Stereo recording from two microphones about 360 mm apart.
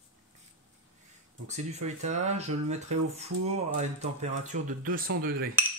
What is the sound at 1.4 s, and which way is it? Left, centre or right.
Speech, centre.